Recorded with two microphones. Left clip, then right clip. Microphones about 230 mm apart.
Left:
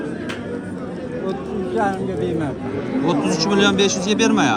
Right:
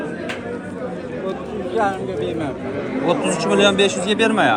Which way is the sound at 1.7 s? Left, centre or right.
Left.